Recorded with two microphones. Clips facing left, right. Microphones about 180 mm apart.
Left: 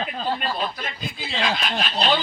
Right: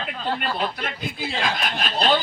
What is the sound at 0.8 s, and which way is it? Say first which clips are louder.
Speech: right 3 dB; 50° right (ahead or behind).